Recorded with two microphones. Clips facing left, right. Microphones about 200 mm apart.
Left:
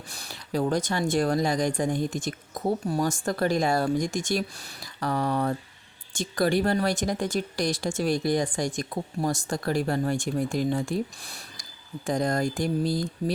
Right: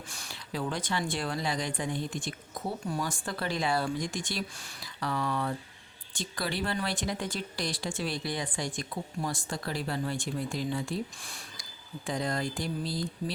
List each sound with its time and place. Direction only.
0.1 s speech: 40° left (ahead or behind)